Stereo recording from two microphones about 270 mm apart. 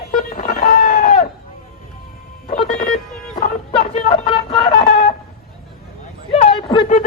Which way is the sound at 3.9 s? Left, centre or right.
Centre.